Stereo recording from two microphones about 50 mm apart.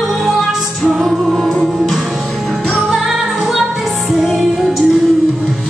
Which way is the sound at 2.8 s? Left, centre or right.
Centre.